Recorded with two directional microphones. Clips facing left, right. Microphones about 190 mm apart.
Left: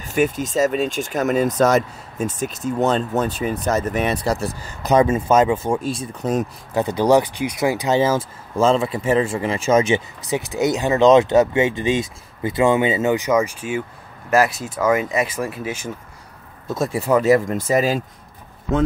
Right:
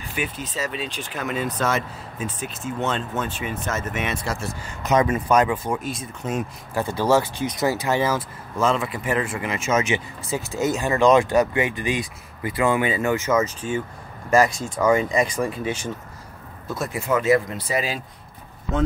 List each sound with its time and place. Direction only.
0.0 s speech: 45° left (ahead or behind)
6.7 s speech: 20° left (ahead or behind)
10.2 s speech: 15° left (ahead or behind)
16.6 s speech: 25° left (ahead or behind); by 18.0 s 45° left (ahead or behind)